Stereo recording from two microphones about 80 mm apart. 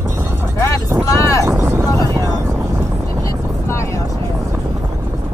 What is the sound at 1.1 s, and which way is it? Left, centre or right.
Vehicle, left.